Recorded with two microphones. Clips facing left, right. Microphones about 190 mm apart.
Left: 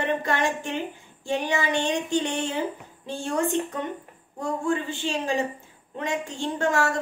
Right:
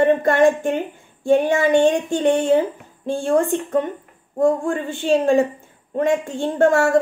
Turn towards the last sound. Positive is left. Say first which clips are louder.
# right 9 dB
turn(degrees=-50)  # may be behind; listen again after turning